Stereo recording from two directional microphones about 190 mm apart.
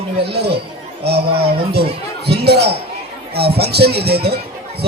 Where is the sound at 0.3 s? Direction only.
60° right (ahead or behind).